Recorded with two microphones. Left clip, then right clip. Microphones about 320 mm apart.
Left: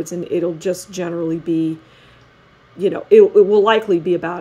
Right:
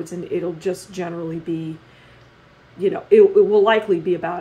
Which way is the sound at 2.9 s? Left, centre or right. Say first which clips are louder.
Left 3 dB; left.